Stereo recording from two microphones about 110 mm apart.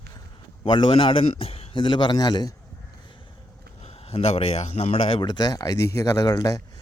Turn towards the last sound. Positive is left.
turn(degrees=35)  # may be behind; listen again after turning